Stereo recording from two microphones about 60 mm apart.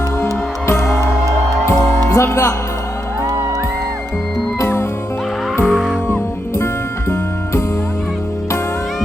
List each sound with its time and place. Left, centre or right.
0.7 s music: left
1.0 s music: right
2.1 s speech: left
4.6 s music: left
5.6 s music: centre